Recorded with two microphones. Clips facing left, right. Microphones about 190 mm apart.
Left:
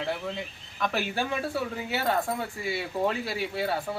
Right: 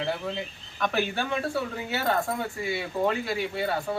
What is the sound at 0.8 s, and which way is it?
Speech, centre (ahead or behind).